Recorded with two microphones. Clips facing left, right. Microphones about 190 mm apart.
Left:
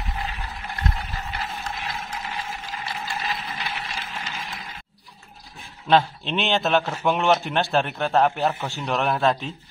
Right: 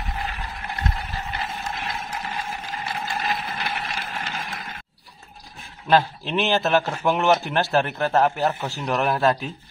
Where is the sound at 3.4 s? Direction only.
55° right (ahead or behind).